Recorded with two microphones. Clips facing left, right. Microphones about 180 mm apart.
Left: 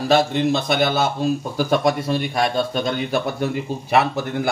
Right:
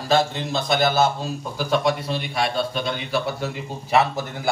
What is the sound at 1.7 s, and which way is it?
Speech, 50° left (ahead or behind).